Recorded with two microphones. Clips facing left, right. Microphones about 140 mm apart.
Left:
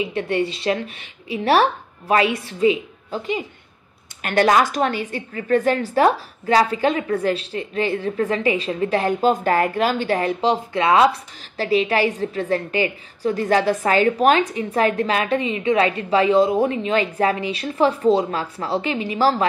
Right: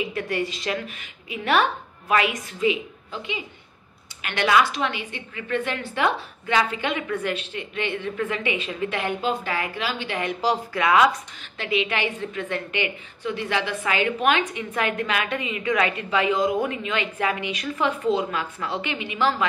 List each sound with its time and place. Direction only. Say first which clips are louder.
0.0 s a woman's voice: left 5 dB; 30° left (ahead or behind)
10.4 s a woman's voice: left 4 dB; 25° left (ahead or behind)